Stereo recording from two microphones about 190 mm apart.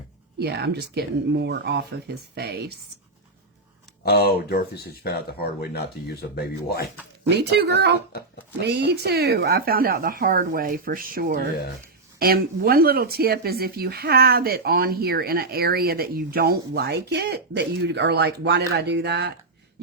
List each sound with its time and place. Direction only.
0.3 s speech: 60° right (ahead or behind)
4.0 s speech: 55° left (ahead or behind)
7.3 s speech: 60° right (ahead or behind)